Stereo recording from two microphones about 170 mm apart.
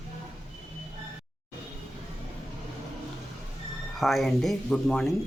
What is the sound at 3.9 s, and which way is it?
Speech, centre (ahead or behind).